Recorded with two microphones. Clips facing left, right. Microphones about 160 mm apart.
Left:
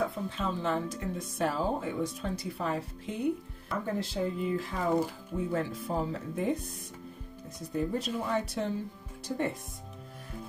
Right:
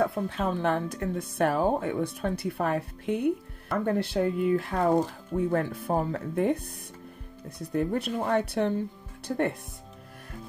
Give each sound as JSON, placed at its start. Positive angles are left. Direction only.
{"t": 0.0, "sound": "speech", "side_deg": -65}